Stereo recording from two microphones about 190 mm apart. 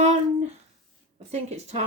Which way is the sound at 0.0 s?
35° right (ahead or behind).